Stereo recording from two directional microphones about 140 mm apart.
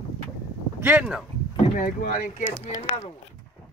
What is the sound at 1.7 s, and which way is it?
Speech, 75° left (ahead or behind).